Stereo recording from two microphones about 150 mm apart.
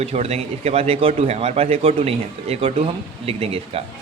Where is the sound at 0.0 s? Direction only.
45° right (ahead or behind).